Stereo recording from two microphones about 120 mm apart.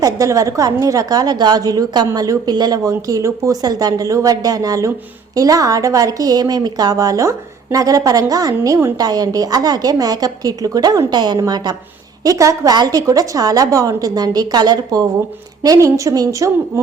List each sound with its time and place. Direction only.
0.0 s a woman's voice: 30° right (ahead or behind)